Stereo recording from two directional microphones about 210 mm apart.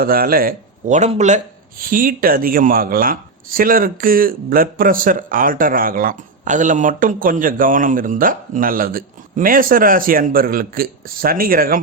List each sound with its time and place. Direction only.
0.0 s speech: 45° right (ahead or behind)